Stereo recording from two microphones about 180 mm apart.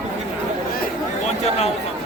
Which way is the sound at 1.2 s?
35° left (ahead or behind).